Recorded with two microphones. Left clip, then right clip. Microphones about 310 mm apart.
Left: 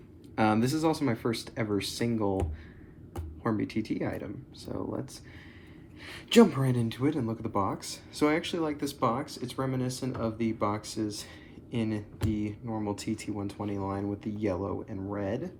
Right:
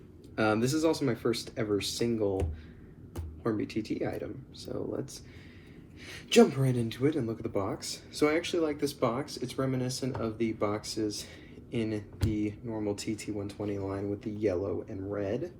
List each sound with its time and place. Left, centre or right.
0.3 s speech: left
3.4 s speech: left
6.2 s speech: left